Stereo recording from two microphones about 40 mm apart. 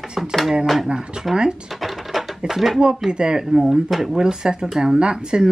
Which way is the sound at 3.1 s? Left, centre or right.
Right.